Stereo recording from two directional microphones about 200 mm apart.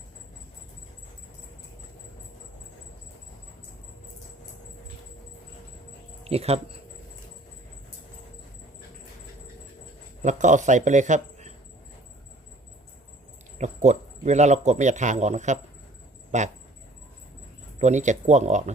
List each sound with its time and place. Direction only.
6.2 s speech: 30° right (ahead or behind)
10.2 s a man's voice: 40° right (ahead or behind)
13.6 s a man's voice: 35° right (ahead or behind)
17.7 s a man's voice: 35° right (ahead or behind)